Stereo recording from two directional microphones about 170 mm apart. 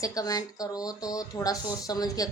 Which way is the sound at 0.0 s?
20° left (ahead or behind).